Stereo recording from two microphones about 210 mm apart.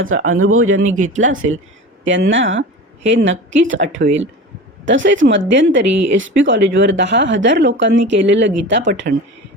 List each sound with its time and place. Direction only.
0.3 s speech: 75° right (ahead or behind)
0.9 s speech: 35° right (ahead or behind)
2.0 s speech: 65° right (ahead or behind)
9.1 s speech: 40° right (ahead or behind)